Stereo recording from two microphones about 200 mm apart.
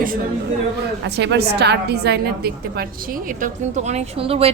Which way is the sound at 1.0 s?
60° right (ahead or behind).